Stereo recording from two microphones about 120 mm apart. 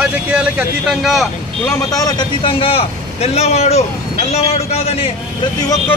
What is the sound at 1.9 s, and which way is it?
Speech, 30° left (ahead or behind).